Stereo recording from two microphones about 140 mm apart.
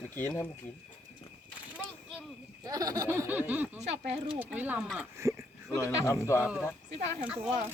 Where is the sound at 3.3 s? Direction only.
10° right (ahead or behind).